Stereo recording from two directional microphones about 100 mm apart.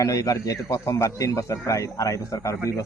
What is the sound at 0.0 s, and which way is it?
Speech, 35° left (ahead or behind).